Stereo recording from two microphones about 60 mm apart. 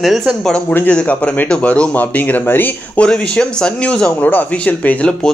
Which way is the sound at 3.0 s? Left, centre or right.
Centre.